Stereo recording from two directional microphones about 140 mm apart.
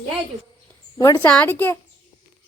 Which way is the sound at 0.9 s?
25° left (ahead or behind).